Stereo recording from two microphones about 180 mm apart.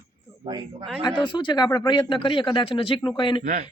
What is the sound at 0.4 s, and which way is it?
Speech, 25° right (ahead or behind).